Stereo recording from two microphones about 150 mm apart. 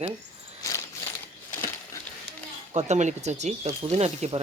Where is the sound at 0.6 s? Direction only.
25° left (ahead or behind).